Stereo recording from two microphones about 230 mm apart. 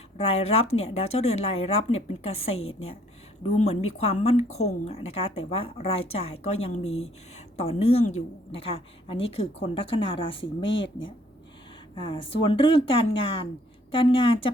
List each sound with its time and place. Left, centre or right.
0.2 s speech: left
10.4 s speech: left
11.9 s speech: left